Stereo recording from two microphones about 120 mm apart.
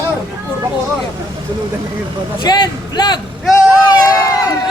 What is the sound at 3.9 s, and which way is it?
Run, 30° left (ahead or behind).